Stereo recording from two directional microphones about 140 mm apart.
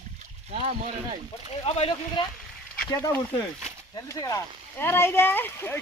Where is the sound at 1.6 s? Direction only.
45° left (ahead or behind).